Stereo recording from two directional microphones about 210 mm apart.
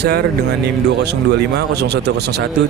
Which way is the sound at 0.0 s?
50° right (ahead or behind).